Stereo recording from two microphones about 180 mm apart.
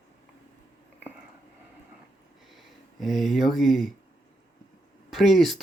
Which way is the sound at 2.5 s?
Centre (ahead or behind).